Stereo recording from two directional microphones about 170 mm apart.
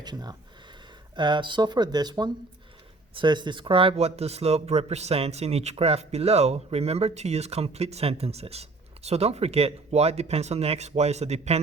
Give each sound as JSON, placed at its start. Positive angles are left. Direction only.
{"t": 0.0, "sound": "speech", "side_deg": -25}